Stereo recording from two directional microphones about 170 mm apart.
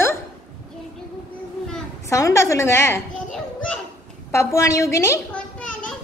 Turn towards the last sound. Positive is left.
turn(degrees=5)  # may be behind; listen again after turning